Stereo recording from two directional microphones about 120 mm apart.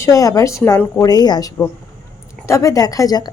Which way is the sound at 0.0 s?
25° left (ahead or behind).